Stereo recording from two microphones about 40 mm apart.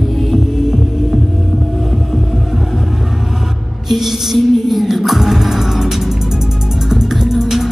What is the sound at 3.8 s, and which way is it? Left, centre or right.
Music, centre.